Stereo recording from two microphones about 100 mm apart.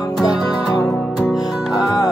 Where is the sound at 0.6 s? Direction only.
5° left (ahead or behind).